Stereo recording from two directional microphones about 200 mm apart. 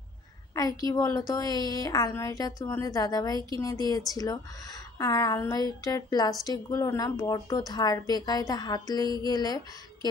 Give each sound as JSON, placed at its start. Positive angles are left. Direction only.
{"t": 0.8, "sound": "a woman's voice", "side_deg": 15}